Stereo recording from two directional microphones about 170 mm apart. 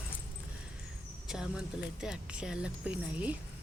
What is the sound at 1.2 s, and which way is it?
Speech, 5° right (ahead or behind).